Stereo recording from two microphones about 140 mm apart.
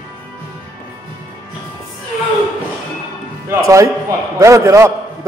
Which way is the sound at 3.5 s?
25° right (ahead or behind).